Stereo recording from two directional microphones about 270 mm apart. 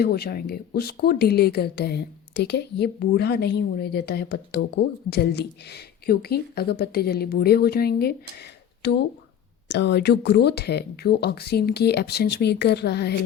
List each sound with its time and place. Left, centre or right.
0.0 s speech: left